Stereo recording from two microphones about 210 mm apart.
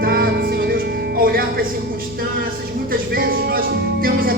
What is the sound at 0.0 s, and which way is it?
Music, 45° right (ahead or behind).